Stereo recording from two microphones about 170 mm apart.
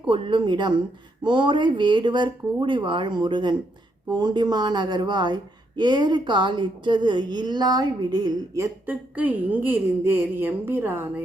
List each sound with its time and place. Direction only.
0.1 s a woman's voice: 30° right (ahead or behind); by 11.0 s 10° right (ahead or behind)